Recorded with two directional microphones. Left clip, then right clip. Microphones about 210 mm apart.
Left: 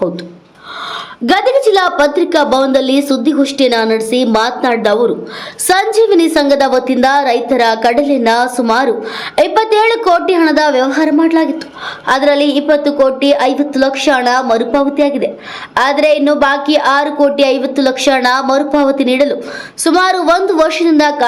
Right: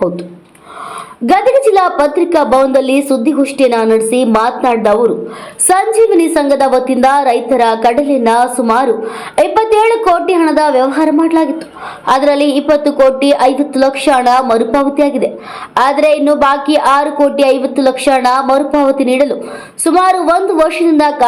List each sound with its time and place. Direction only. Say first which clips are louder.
1.3 s a woman's voice: right 1 dB; 5° left (ahead or behind)
6.0 s a woman's voice: even; 10° left (ahead or behind)